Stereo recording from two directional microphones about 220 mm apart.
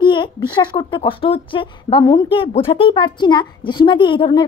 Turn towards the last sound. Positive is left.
turn(degrees=20)  # may be behind; listen again after turning